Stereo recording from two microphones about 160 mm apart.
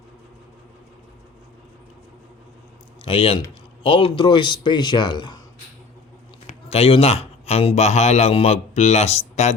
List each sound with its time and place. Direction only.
3.0 s a man's voice: 35° left (ahead or behind)
6.5 s a man's voice: 40° left (ahead or behind)